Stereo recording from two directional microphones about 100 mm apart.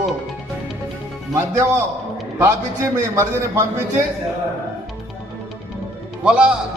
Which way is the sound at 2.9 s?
30° right (ahead or behind).